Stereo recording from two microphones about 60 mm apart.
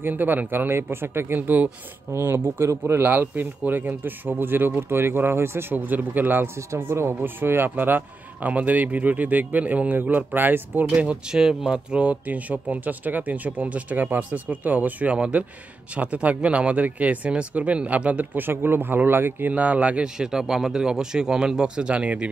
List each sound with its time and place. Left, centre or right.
0.0 s speech: right
6.7 s speech: right
7.2 s speech: right
10.9 s speech: centre
18.4 s speech: right
19.5 s speech: right
20.2 s speech: centre